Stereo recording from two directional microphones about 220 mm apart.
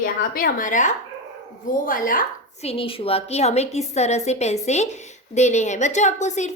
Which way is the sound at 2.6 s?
25° left (ahead or behind).